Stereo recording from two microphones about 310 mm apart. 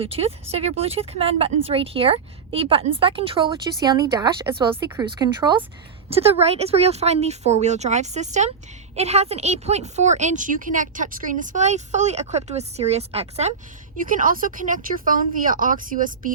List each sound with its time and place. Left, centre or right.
0.0 s a woman's voice: centre